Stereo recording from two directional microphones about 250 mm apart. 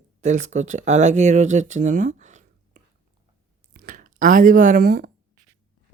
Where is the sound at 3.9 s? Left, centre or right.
Right.